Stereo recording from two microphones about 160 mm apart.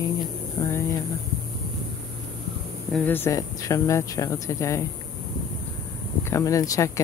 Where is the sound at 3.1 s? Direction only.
15° left (ahead or behind).